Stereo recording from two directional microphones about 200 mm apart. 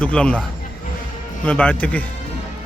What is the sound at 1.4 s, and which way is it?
Speech, 5° left (ahead or behind).